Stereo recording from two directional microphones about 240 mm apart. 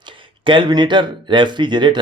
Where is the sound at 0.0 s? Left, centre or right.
Centre.